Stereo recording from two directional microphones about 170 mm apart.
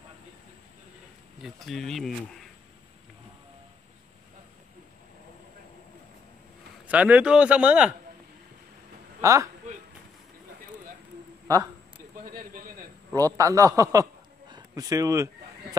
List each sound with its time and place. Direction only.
1.4 s speech: centre (ahead or behind)
6.9 s speech: 10° right (ahead or behind)
9.2 s speech: 15° right (ahead or behind)
12.4 s a sound: 55° right (ahead or behind)
13.1 s a man's voice: 20° right (ahead or behind)